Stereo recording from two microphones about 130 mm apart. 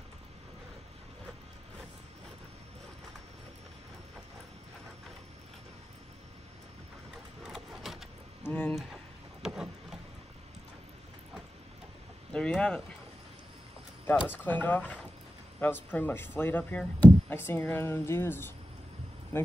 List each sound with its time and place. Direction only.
7.4 s a sound: centre (ahead or behind)
8.5 s speech: 15° left (ahead or behind)
8.7 s boat: centre (ahead or behind)
12.3 s speech: 10° left (ahead or behind)
14.4 s speech: 15° left (ahead or behind)